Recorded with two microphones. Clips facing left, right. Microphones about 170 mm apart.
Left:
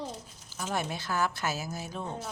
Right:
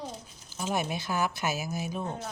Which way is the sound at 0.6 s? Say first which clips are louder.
Right 2 dB; 15° right (ahead or behind).